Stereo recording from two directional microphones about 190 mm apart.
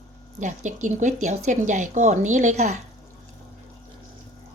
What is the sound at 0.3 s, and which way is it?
Speech, 40° right (ahead or behind).